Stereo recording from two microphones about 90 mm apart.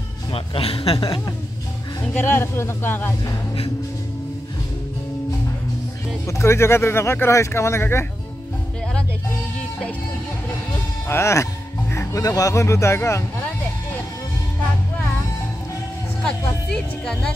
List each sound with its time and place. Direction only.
0.3 s a man's voice: 90° left
0.9 s a woman's voice: 60° left (ahead or behind)
2.1 s speech: 25° left (ahead or behind)
6.2 s speech: 30° left (ahead or behind)
11.1 s speech: 30° left (ahead or behind)
11.9 s music: 30° left (ahead or behind)
12.2 s speech: 40° left (ahead or behind)
16.3 s speech: 10° left (ahead or behind)